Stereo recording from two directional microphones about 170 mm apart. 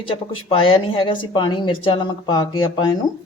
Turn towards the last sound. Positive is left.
turn(degrees=25)  # may be behind; listen again after turning